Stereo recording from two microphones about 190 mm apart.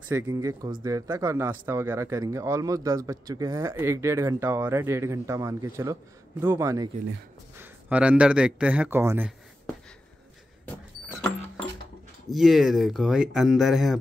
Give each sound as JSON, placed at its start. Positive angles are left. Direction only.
{"t": 0.1, "sound": "speech", "side_deg": -15}
{"t": 12.3, "sound": "speech", "side_deg": 0}